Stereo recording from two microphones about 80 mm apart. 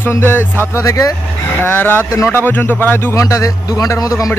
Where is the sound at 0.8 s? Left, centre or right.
Left.